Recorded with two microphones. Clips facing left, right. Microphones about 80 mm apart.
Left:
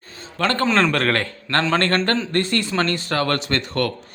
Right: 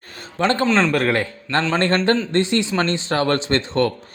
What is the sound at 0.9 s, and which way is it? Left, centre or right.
Speech, centre.